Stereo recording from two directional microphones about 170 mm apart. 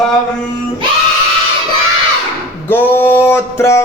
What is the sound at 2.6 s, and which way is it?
Male singing, 10° left (ahead or behind).